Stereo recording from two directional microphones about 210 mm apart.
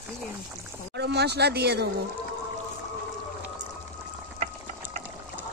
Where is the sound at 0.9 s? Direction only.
50° right (ahead or behind).